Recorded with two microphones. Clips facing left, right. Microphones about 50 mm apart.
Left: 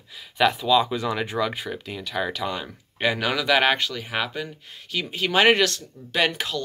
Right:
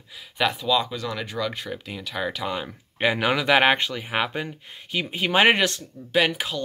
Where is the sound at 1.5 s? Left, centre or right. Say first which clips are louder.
Left 1 dB; centre; by 5.8 s right.